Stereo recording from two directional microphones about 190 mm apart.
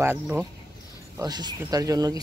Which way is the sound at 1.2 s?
20° right (ahead or behind).